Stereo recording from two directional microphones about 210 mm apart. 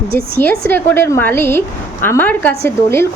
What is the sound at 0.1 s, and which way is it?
Speech, 45° right (ahead or behind).